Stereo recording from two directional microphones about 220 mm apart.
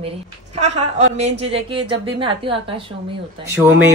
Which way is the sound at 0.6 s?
30° right (ahead or behind).